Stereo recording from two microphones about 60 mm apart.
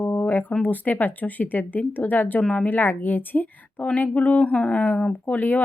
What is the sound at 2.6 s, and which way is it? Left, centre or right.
Speech, left.